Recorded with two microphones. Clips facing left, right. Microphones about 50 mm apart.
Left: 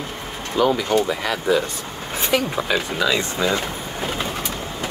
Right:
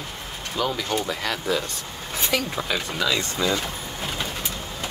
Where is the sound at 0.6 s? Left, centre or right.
Centre.